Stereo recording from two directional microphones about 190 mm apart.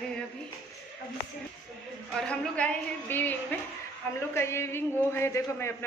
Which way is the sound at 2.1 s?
5° left (ahead or behind).